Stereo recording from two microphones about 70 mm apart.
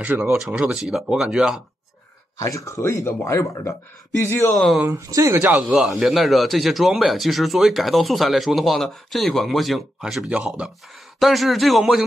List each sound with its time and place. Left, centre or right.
0.0 s speech: right
0.3 s speech: centre
2.3 s speech: left
4.6 s a man's voice: centre
5.3 s speech: right
5.6 s a man's voice: centre
11.1 s a man's voice: centre